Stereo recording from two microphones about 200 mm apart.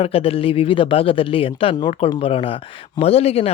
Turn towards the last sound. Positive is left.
turn(degrees=30)  # may be behind; listen again after turning